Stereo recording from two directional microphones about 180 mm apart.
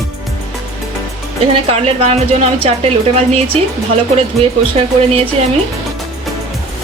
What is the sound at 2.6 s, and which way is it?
Speech, 35° right (ahead or behind).